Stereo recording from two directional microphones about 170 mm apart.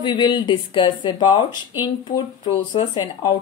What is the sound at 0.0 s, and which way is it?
Speech, 25° left (ahead or behind).